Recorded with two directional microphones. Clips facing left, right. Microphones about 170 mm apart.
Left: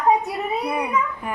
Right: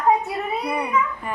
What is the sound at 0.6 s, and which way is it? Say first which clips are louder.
Speech: right 2 dB; 5° left (ahead or behind).